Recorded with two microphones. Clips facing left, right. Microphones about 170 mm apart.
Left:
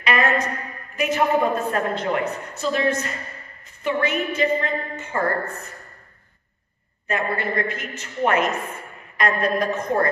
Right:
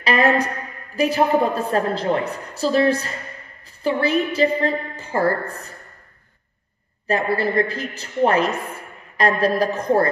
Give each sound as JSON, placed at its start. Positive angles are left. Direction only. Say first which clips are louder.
{"t": 0.0, "sound": "a sound", "louder": "right 3 dB", "side_deg": -35}
{"t": 0.9, "sound": "a woman's voice", "louder": "right 3 dB", "side_deg": -35}
{"t": 7.1, "sound": "a woman's voice", "louder": "right 4 dB", "side_deg": -35}